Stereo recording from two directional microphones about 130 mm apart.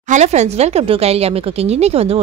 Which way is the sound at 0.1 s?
60° right (ahead or behind).